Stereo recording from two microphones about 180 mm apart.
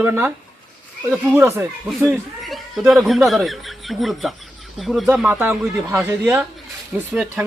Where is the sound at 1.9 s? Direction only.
Centre (ahead or behind).